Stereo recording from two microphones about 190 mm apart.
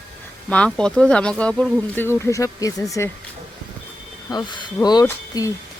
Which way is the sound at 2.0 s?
15° left (ahead or behind).